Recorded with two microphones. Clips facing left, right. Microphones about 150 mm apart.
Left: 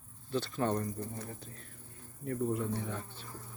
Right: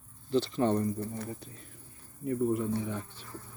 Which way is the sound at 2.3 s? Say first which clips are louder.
Right 4 dB; 10° right (ahead or behind).